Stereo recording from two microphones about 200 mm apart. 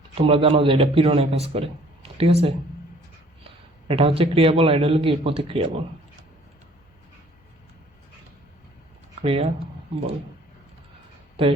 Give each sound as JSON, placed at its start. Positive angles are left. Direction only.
{"t": 0.2, "sound": "speech", "side_deg": -25}
{"t": 3.8, "sound": "speech", "side_deg": -30}
{"t": 9.2, "sound": "speech", "side_deg": -30}